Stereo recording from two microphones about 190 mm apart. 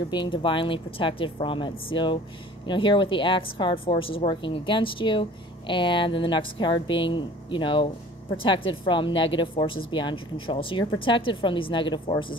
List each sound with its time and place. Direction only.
0.1 s a woman's voice: 25° left (ahead or behind)